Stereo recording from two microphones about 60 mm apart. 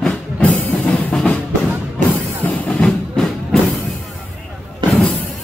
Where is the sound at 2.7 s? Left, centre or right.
Centre.